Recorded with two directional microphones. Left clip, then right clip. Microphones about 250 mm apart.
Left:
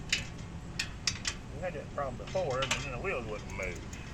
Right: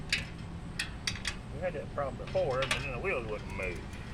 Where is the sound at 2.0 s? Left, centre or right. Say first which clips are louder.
Right 2 dB; centre.